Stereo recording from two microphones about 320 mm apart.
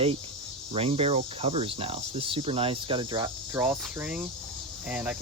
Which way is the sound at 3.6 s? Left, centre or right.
Centre.